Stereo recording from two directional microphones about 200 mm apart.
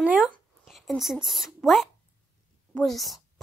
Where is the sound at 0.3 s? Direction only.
Centre (ahead or behind).